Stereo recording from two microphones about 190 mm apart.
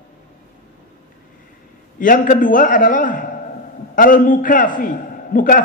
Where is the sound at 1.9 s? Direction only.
45° left (ahead or behind).